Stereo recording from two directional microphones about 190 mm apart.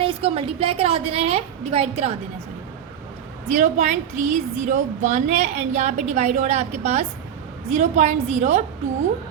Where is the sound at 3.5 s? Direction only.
40° right (ahead or behind).